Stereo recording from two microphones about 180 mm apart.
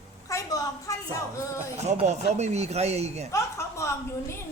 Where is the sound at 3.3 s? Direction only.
15° left (ahead or behind).